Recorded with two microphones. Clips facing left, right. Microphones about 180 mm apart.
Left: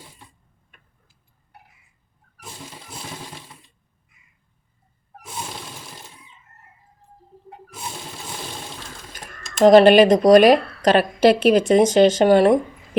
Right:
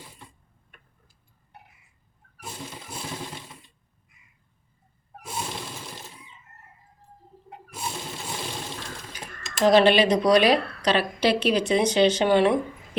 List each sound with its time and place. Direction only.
9.6 s a woman's voice: 45° left (ahead or behind)